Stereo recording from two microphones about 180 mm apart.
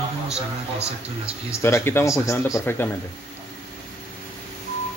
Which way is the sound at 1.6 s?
15° left (ahead or behind).